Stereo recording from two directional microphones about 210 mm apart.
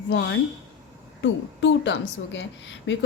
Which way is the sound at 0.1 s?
60° left (ahead or behind).